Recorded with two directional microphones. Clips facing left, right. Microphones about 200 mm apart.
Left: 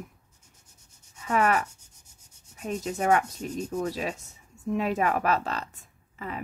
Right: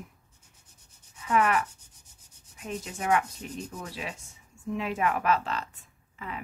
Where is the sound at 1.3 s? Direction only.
40° left (ahead or behind).